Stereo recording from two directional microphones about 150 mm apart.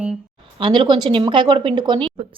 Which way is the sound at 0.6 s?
35° right (ahead or behind).